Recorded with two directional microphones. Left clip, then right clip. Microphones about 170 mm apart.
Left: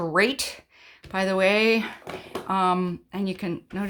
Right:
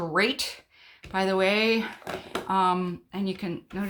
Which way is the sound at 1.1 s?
45° left (ahead or behind).